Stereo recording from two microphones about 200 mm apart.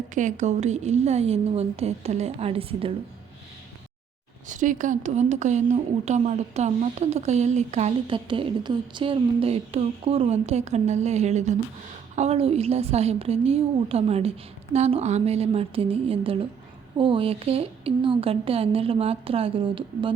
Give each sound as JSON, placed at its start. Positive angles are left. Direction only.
{"t": 0.1, "sound": "speech", "side_deg": -40}
{"t": 4.4, "sound": "a woman's voice", "side_deg": -40}